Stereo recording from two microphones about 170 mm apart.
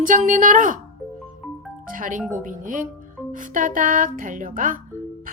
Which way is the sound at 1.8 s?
50° right (ahead or behind).